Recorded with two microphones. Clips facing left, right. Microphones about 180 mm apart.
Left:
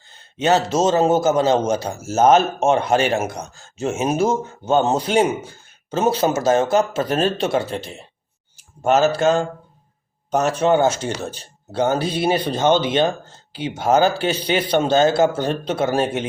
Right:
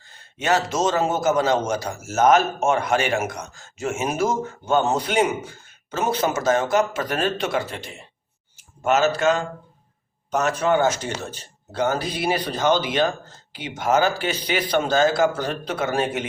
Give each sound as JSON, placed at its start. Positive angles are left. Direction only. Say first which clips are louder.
{"t": 0.3, "sound": "a man's voice", "louder": "left 4 dB", "side_deg": 25}